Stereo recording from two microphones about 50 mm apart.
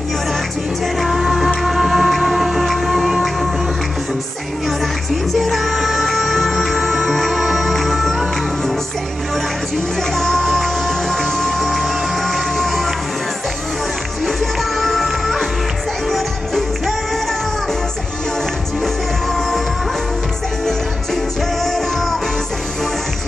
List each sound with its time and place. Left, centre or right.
1.0 s music: centre
3.0 s music: centre
4.6 s music: centre
10.1 s music: centre
14.8 s music: centre